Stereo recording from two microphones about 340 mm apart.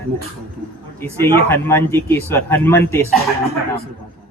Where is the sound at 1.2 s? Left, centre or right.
Centre.